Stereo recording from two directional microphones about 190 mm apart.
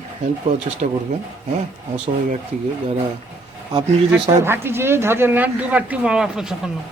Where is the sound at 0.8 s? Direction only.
40° right (ahead or behind).